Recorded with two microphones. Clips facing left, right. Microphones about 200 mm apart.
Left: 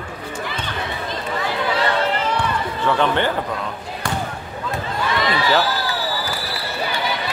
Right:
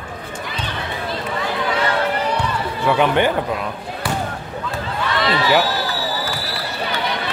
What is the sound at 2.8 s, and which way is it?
Speech, 15° right (ahead or behind).